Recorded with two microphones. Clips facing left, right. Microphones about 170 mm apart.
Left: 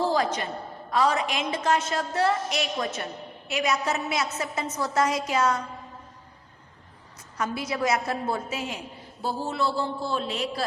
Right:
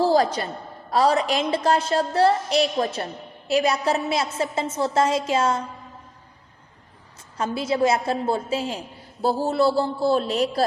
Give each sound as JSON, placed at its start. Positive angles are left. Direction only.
{"t": 0.0, "sound": "a sound", "side_deg": -35}
{"t": 0.9, "sound": "a woman's voice", "side_deg": -35}
{"t": 7.3, "sound": "a woman's voice", "side_deg": -30}